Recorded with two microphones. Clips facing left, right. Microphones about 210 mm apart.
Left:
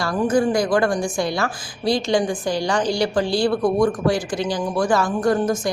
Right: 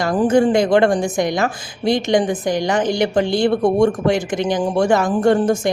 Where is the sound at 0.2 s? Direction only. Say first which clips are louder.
Right 4 dB; 30° right (ahead or behind).